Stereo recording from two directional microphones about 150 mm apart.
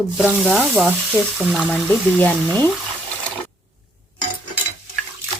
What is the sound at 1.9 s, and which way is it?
Speech, 10° left (ahead or behind).